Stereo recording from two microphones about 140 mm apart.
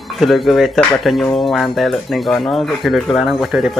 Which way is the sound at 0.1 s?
Centre (ahead or behind).